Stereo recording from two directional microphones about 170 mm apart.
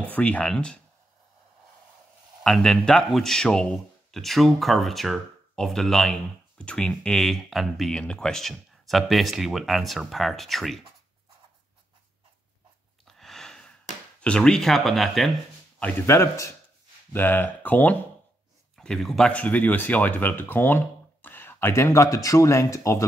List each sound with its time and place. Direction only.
0.1 s speech: 10° left (ahead or behind)
2.4 s speech: 5° left (ahead or behind)
13.0 s a sound: centre (ahead or behind)
14.2 s speech: 5° left (ahead or behind)
15.8 s speech: 15° left (ahead or behind)